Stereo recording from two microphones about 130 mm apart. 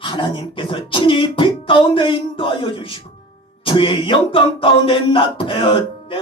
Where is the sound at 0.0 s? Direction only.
40° left (ahead or behind).